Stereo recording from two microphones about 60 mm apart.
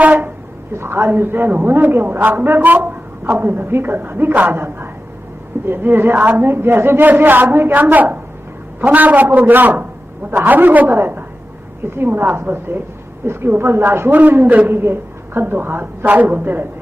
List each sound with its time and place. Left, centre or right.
0.0 s a sound: right
0.7 s a man's voice: right
14.1 s a man's voice: right